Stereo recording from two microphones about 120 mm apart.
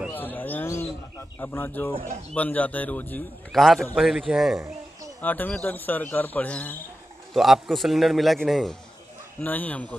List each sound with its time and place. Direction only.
0.1 s bird: 15° left (ahead or behind)
1.4 s speech: 15° left (ahead or behind)
3.5 s a man's voice: centre (ahead or behind)
5.2 s speech: 15° left (ahead or behind)
7.3 s a man's voice: centre (ahead or behind)
9.4 s speech: 15° left (ahead or behind)